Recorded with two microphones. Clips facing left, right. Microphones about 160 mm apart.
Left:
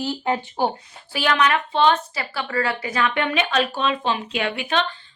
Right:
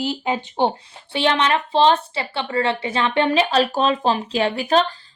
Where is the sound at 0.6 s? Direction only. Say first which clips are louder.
Right 2 dB; 25° right (ahead or behind).